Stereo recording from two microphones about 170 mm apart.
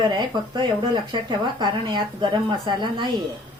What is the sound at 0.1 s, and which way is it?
Speech, 25° right (ahead or behind).